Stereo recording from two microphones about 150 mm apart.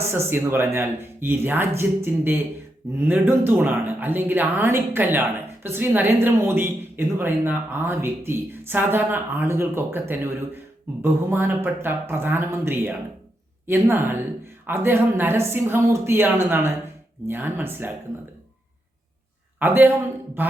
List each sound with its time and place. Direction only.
0.1 s a woman's voice: 15° right (ahead or behind)
19.5 s a woman's voice: 10° right (ahead or behind)